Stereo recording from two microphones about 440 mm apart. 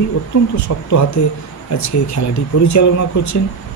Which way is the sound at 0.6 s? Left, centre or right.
Left.